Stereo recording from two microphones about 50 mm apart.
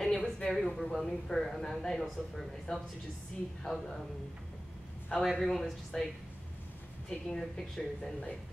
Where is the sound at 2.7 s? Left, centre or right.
Centre.